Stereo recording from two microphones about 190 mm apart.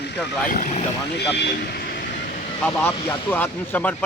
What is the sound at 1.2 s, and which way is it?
Speech, 60° left (ahead or behind).